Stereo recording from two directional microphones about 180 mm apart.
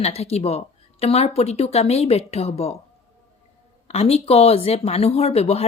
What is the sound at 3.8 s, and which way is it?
Speech, 35° left (ahead or behind).